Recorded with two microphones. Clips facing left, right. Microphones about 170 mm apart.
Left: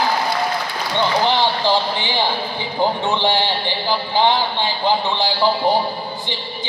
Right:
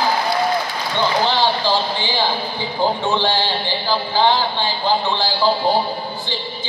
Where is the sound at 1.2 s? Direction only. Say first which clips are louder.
Even; 20° left (ahead or behind).